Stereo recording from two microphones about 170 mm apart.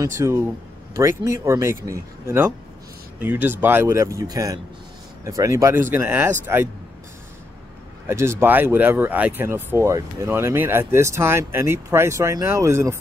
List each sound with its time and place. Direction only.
0.2 s speech: 20° right (ahead or behind)
8.1 s speech: 15° right (ahead or behind)